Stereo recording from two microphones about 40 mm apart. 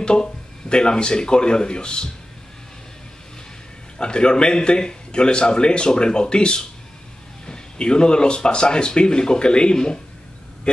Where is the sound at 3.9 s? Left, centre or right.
Left.